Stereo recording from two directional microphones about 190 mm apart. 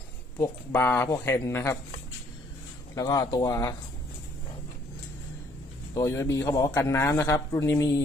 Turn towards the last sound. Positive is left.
turn(degrees=15)  # may be behind; listen again after turning